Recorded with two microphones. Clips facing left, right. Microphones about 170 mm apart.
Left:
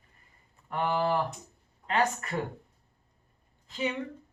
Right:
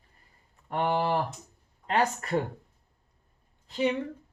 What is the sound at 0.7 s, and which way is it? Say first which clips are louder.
Speech: right 1 dB; 30° right (ahead or behind).